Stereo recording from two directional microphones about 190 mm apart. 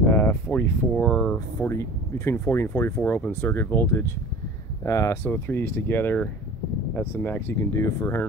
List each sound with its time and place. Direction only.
0.1 s speech: 10° left (ahead or behind)